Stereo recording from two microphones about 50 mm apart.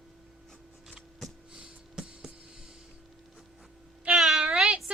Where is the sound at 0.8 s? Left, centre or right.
Centre.